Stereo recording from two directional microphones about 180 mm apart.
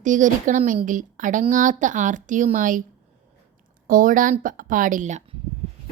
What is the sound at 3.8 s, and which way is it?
Speech, 50° right (ahead or behind).